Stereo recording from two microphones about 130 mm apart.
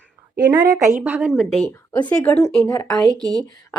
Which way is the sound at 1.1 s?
15° right (ahead or behind).